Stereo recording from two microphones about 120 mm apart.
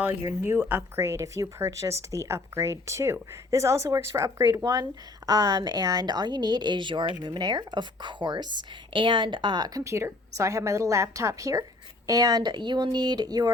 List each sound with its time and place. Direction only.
0.0 s speech: 20° right (ahead or behind)